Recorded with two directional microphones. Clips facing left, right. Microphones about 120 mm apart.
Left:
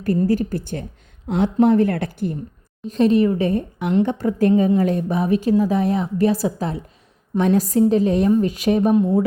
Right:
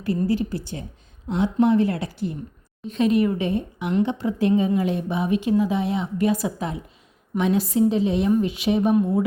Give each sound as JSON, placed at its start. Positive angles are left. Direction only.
{"t": 0.0, "sound": "a woman's voice", "side_deg": 45}
{"t": 2.9, "sound": "a woman's voice", "side_deg": 35}